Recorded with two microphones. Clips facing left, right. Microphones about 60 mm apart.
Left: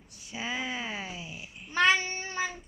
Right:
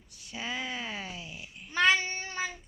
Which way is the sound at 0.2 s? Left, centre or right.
Centre.